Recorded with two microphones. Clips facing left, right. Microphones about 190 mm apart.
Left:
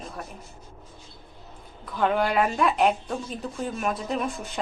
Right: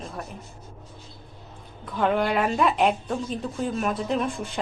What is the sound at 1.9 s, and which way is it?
Speech, centre (ahead or behind).